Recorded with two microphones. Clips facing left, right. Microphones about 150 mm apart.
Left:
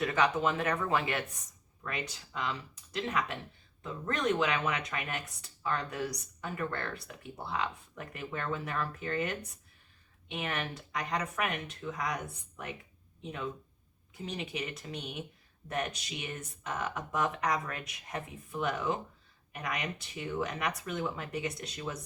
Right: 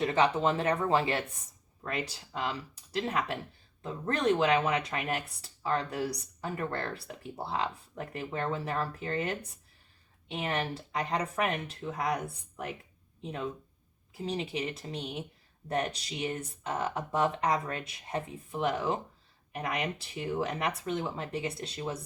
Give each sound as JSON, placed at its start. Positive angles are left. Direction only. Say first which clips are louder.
{"t": 0.0, "sound": "speech", "louder": "right 2 dB", "side_deg": -30}